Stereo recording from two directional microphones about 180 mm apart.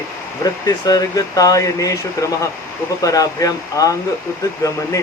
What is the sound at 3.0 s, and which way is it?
Speech, 20° left (ahead or behind).